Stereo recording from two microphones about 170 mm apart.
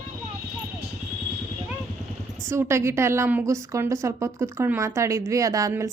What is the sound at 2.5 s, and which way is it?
A woman's voice, 15° right (ahead or behind).